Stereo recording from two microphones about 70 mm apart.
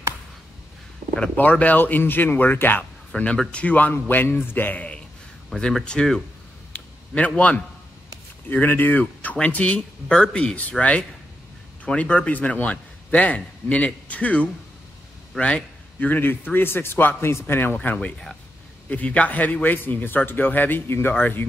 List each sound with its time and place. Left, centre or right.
1.1 s a man's voice: centre
15.3 s a sound: centre
16.1 s a man's voice: left
17.8 s speech: centre
18.9 s a man's voice: left